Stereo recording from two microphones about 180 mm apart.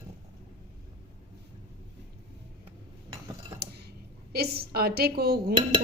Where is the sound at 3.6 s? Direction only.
60° right (ahead or behind).